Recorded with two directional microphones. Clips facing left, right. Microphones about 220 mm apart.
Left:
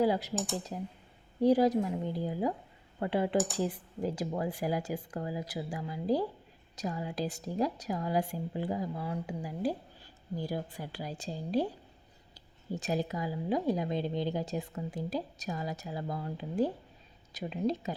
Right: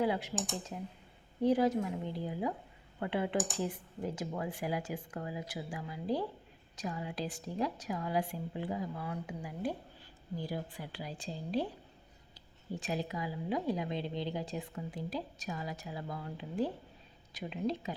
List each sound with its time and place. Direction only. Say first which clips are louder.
0.0 s speech: left 4 dB; 35° left (ahead or behind)
12.7 s speech: left 4 dB; 40° left (ahead or behind)